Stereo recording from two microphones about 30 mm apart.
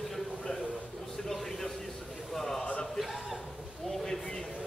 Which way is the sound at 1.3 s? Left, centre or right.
Centre.